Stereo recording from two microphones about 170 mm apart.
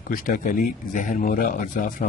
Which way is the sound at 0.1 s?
55° left (ahead or behind).